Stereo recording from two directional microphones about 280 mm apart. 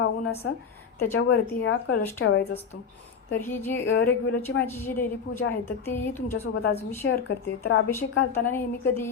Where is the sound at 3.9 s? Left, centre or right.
Left.